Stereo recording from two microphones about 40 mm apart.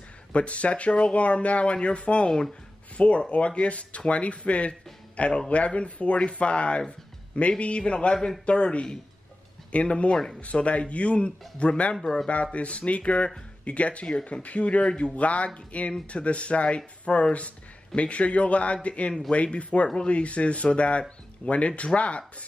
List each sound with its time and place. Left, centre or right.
0.3 s speech: left